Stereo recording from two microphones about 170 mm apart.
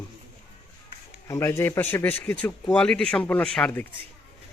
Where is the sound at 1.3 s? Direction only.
15° left (ahead or behind).